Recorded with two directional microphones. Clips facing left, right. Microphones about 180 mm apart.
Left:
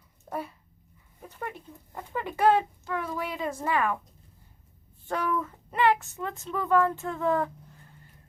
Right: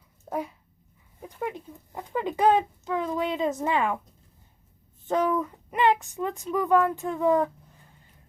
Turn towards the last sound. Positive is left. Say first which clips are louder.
# right 4 dB
turn(degrees=-15)  # may be behind; listen again after turning